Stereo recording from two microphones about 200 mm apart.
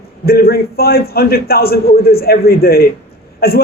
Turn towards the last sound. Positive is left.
turn(degrees=50)  # may be behind; listen again after turning